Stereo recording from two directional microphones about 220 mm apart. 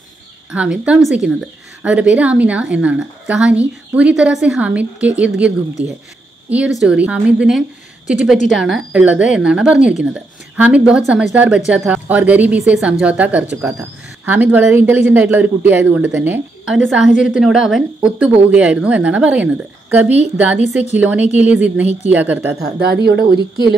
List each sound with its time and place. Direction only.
0.5 s speech: 5° right (ahead or behind)
6.5 s a woman's voice: 5° right (ahead or behind)
20.6 s a woman's voice: 30° left (ahead or behind)
21.0 s a woman's voice: 10° right (ahead or behind)
22.6 s speech: 50° right (ahead or behind)